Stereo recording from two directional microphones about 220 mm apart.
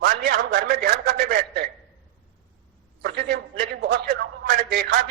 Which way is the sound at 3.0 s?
45° right (ahead or behind).